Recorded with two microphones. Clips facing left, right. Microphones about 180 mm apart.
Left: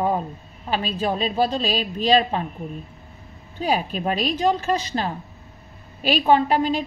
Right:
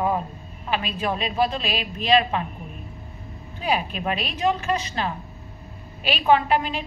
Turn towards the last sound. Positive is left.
turn(degrees=35)  # may be behind; listen again after turning